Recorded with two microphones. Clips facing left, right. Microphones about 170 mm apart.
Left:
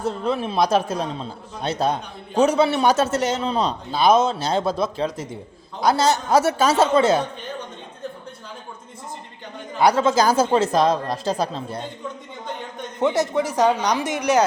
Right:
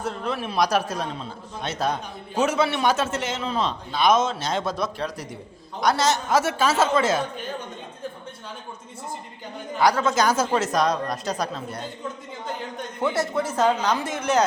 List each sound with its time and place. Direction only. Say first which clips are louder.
0.0 s a man's voice: left 5 dB; 25° left (ahead or behind)
9.7 s speech: left 3 dB; 25° left (ahead or behind)
13.0 s speech: left 4 dB; 20° left (ahead or behind)